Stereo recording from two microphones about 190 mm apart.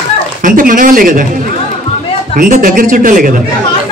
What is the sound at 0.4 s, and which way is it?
Speech, 45° right (ahead or behind).